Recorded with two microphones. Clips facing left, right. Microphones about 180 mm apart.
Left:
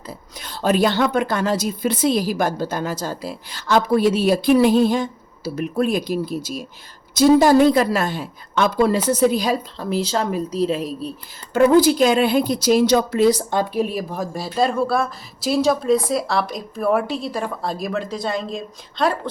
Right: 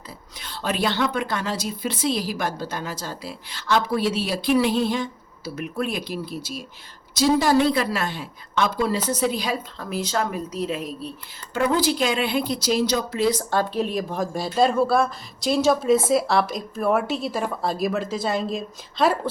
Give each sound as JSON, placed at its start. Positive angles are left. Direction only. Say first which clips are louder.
{"t": 0.4, "sound": "a woman's voice", "louder": "left 7 dB", "side_deg": 40}
{"t": 11.5, "sound": "a woman's voice", "louder": "left 8 dB", "side_deg": 45}
{"t": 13.5, "sound": "a woman's voice", "louder": "left 2 dB", "side_deg": 15}